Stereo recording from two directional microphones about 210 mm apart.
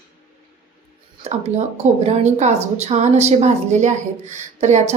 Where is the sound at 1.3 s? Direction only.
30° right (ahead or behind).